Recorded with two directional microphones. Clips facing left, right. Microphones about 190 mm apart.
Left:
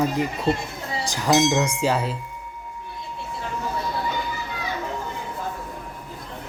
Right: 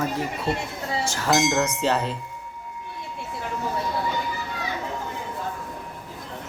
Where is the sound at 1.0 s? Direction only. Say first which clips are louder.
Left 3 dB; 15° left (ahead or behind).